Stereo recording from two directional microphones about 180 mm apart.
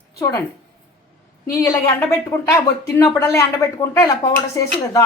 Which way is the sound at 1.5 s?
20° left (ahead or behind).